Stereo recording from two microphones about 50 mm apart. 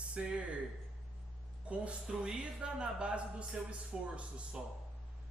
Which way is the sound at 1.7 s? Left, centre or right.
Right.